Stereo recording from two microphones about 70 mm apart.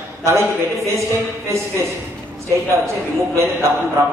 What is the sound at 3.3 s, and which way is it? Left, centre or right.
Speech, right.